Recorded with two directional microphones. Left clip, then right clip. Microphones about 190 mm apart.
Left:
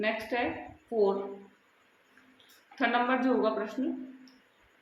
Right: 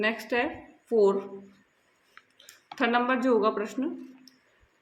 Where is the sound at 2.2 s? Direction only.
75° right (ahead or behind).